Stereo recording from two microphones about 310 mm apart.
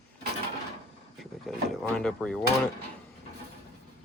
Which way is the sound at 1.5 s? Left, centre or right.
Centre.